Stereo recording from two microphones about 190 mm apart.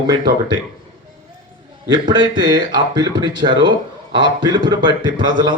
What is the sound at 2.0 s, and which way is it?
A man's voice, 20° right (ahead or behind).